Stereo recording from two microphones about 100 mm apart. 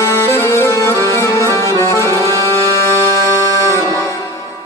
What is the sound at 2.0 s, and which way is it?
Music, 30° right (ahead or behind).